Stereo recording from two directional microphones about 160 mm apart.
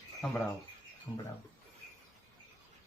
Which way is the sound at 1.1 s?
20° left (ahead or behind).